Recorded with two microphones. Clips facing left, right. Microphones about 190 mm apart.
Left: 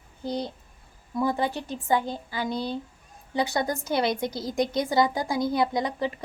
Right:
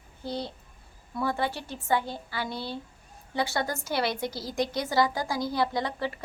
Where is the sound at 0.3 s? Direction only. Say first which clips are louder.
Left 3 dB; 15° left (ahead or behind).